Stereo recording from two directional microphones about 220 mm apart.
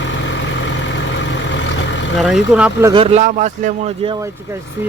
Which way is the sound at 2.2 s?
5° right (ahead or behind).